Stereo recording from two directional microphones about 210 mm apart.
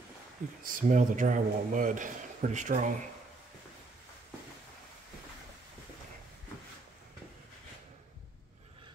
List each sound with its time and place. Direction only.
0.7 s a man's voice: 40° right (ahead or behind)